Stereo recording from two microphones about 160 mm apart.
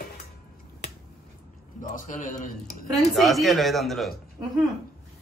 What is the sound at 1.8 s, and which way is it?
Speech, 55° left (ahead or behind).